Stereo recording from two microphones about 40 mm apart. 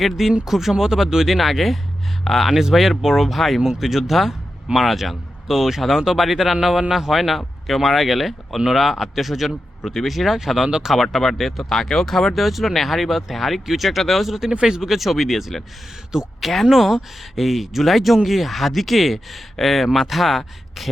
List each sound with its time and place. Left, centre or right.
0.0 s speech: centre